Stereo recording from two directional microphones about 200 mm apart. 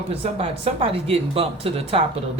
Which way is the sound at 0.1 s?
30° right (ahead or behind).